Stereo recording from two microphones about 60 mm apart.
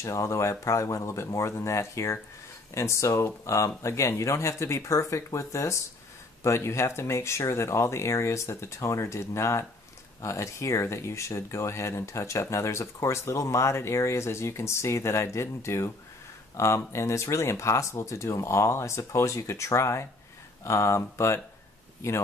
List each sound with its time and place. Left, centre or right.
0.0 s speech: left